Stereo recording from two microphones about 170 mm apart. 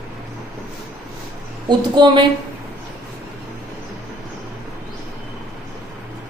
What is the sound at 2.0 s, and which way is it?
Speech, 25° right (ahead or behind).